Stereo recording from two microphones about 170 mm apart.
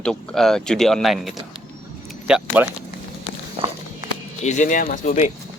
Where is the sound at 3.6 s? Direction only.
30° right (ahead or behind).